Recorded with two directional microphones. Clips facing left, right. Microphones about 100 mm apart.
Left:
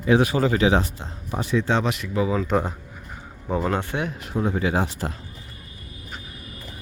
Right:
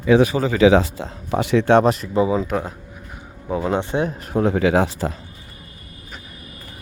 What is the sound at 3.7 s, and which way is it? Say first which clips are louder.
Speech: right 5 dB; 25° right (ahead or behind).